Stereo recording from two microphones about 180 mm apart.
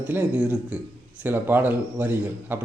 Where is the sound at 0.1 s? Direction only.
10° right (ahead or behind).